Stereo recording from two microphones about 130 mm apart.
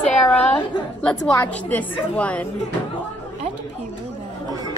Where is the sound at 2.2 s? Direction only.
10° left (ahead or behind).